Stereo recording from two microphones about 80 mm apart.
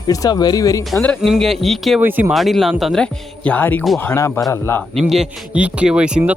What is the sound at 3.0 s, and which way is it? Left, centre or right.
Speech, centre.